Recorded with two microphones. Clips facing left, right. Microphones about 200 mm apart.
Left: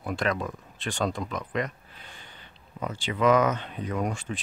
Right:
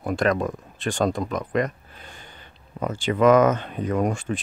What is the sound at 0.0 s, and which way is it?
Speech, 45° right (ahead or behind).